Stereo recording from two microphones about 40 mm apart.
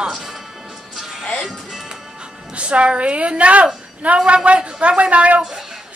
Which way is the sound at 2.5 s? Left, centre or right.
Right.